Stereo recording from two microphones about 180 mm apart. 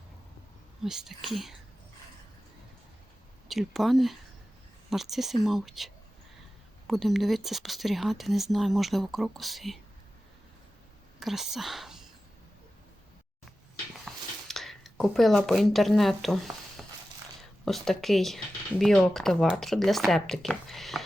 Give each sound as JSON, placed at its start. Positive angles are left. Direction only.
{"t": 0.9, "sound": "speech", "side_deg": 0}
{"t": 3.5, "sound": "speech", "side_deg": 0}
{"t": 11.2, "sound": "speech", "side_deg": 0}
{"t": 14.0, "sound": "a sound", "side_deg": 0}
{"t": 17.7, "sound": "speech", "side_deg": 0}